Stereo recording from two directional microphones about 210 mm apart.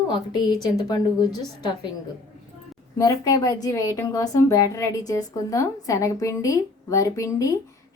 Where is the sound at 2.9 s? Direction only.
15° left (ahead or behind).